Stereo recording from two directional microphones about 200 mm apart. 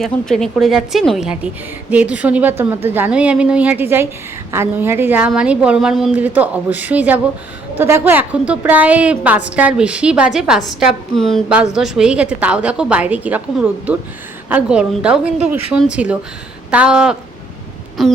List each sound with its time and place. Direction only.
0.0 s a woman's voice: centre (ahead or behind)